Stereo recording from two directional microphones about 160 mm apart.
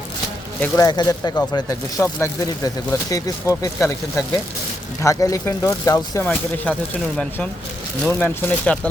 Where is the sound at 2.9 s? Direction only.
20° left (ahead or behind).